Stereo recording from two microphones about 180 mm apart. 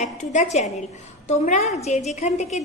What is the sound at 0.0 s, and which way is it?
A woman's voice, 45° left (ahead or behind).